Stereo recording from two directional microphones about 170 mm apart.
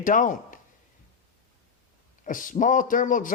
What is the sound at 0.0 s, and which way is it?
Speech, 50° left (ahead or behind).